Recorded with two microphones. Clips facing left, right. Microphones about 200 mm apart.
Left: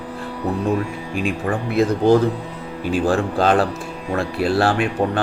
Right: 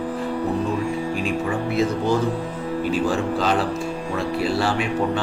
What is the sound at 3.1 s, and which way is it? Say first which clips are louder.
A man's voice: left 4 dB; 55° left (ahead or behind).